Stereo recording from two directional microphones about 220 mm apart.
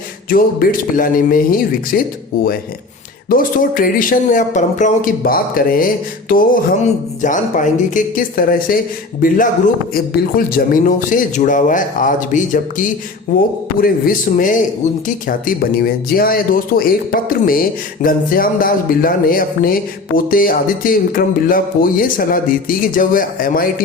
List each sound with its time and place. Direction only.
0.3 s speech: 40° left (ahead or behind)
3.2 s speech: 40° left (ahead or behind)